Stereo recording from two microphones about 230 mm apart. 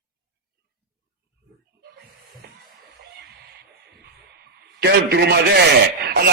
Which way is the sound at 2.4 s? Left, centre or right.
Right.